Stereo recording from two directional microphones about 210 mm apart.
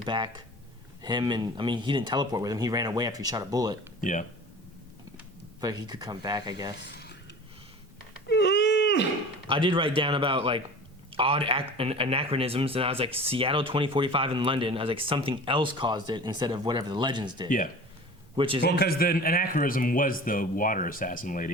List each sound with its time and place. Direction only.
0.0 s speech: 20° right (ahead or behind)
4.0 s a man's voice: 35° left (ahead or behind)
5.5 s speech: 20° right (ahead or behind)
6.7 s a sound: 55° left (ahead or behind)
8.3 s a sound: 55° left (ahead or behind)
9.5 s speech: 25° right (ahead or behind)
18.6 s a man's voice: 50° left (ahead or behind)